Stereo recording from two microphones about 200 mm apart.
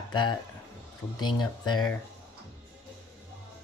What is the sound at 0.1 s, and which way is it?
Speech, 20° left (ahead or behind).